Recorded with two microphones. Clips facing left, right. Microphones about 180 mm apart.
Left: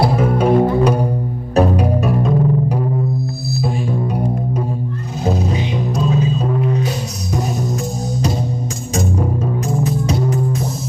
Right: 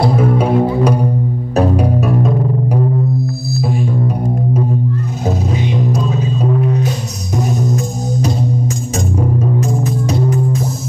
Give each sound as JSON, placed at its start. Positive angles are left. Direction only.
{"t": 0.0, "sound": "music", "side_deg": 0}
{"t": 5.9, "sound": "music", "side_deg": 0}
{"t": 9.4, "sound": "music", "side_deg": 0}